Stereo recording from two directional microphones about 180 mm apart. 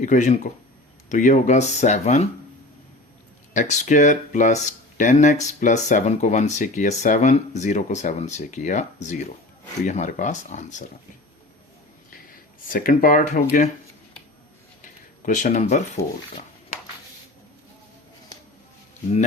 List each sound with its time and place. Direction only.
0.0 s speech: 45° left (ahead or behind)
3.5 s speech: 45° left (ahead or behind)
12.6 s speech: 50° left (ahead or behind)
15.3 s speech: 45° left (ahead or behind)